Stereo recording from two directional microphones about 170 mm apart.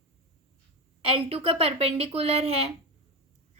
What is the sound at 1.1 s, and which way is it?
A woman's voice, 35° right (ahead or behind).